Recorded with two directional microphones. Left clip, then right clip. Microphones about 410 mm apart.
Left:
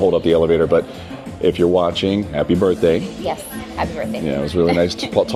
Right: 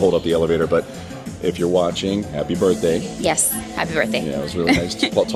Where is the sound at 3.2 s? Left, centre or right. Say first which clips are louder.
Right 3 dB; right.